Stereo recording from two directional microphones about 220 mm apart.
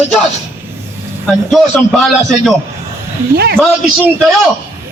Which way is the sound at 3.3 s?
45° right (ahead or behind).